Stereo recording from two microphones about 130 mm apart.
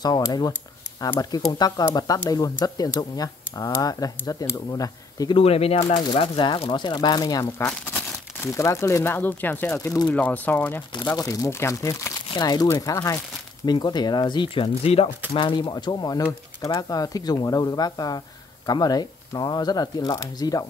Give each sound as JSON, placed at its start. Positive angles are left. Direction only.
{"t": 0.0, "sound": "speech", "side_deg": 30}
{"t": 5.4, "sound": "speech", "side_deg": 50}
{"t": 6.1, "sound": "speech", "side_deg": 40}
{"t": 7.9, "sound": "crumpling", "side_deg": 10}
{"t": 8.5, "sound": "speech", "side_deg": 20}
{"t": 9.8, "sound": "speech", "side_deg": 25}
{"t": 10.0, "sound": "speech", "side_deg": 10}
{"t": 11.1, "sound": "speech", "side_deg": 25}
{"t": 15.3, "sound": "speech", "side_deg": 35}